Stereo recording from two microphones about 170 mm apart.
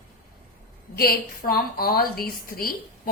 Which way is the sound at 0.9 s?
60° left (ahead or behind).